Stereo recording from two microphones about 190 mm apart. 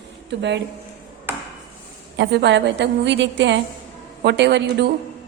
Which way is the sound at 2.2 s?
65° right (ahead or behind).